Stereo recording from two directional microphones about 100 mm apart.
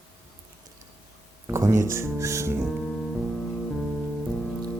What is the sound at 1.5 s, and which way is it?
Speech, 25° right (ahead or behind).